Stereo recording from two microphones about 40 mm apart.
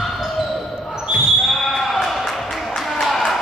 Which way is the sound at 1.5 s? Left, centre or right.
Centre.